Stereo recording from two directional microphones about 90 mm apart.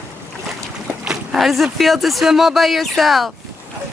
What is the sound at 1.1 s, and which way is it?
Speech, 5° right (ahead or behind).